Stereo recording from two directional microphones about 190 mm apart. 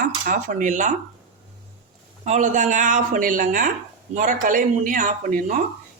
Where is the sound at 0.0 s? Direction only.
45° right (ahead or behind).